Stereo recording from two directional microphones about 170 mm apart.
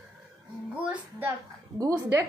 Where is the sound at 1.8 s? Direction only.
20° right (ahead or behind).